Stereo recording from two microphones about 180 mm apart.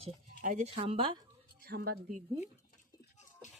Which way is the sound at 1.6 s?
60° right (ahead or behind).